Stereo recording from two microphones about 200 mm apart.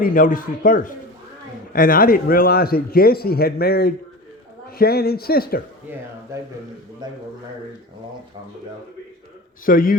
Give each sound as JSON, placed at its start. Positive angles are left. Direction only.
{"t": 0.0, "sound": "a man's voice", "side_deg": 40}
{"t": 7.0, "sound": "a man's voice", "side_deg": -20}
{"t": 9.6, "sound": "a man's voice", "side_deg": 45}